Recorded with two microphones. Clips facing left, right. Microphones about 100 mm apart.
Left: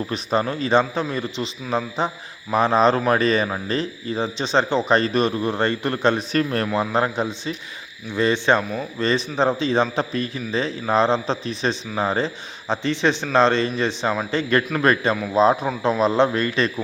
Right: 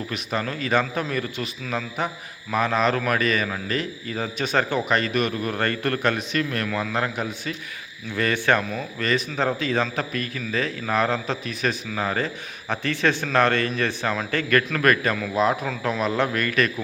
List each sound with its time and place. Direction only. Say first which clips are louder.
0.1 s a man's voice: left 6 dB; 30° left (ahead or behind)